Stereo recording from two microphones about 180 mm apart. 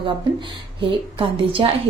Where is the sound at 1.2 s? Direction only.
30° right (ahead or behind).